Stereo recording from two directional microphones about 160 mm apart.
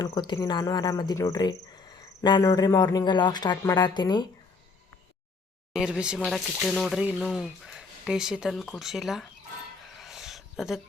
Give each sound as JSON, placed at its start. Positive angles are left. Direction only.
{"t": 0.0, "sound": "speech", "side_deg": 25}
{"t": 5.7, "sound": "speech", "side_deg": -5}
{"t": 10.0, "sound": "a sound", "side_deg": 0}